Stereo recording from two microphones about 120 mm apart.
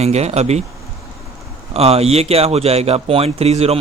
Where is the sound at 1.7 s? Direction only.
55° right (ahead or behind).